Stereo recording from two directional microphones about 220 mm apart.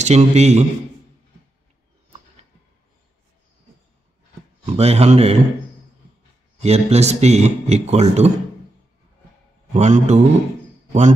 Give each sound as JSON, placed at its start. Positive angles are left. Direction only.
{"t": 0.0, "sound": "a man's voice", "side_deg": -30}
{"t": 4.6, "sound": "speech", "side_deg": -30}
{"t": 6.6, "sound": "speech", "side_deg": -30}
{"t": 9.8, "sound": "a man's voice", "side_deg": -30}